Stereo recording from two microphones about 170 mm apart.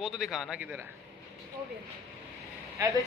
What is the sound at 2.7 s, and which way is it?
Speech, 20° right (ahead or behind).